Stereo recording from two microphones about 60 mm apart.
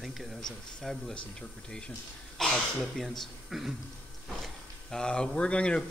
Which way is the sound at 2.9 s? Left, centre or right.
Centre.